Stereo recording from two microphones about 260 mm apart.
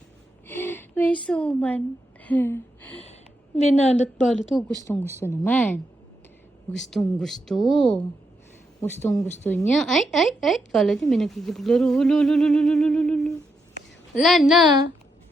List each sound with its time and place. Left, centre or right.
0.4 s a sound: centre
3.7 s a woman's voice: left
4.9 s speech: centre